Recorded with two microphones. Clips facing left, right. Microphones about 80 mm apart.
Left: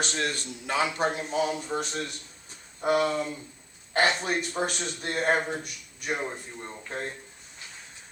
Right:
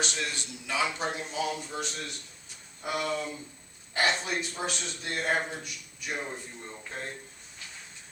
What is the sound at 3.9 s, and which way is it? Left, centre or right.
A man's voice, left.